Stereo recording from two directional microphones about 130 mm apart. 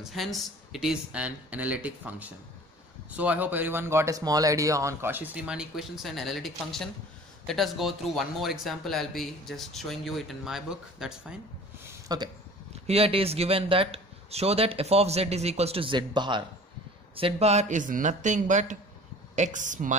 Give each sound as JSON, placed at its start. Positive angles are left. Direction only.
{"t": 0.0, "sound": "speech", "side_deg": 0}
{"t": 12.1, "sound": "speech", "side_deg": -30}
{"t": 12.8, "sound": "speech", "side_deg": -50}
{"t": 17.1, "sound": "a man's voice", "side_deg": -50}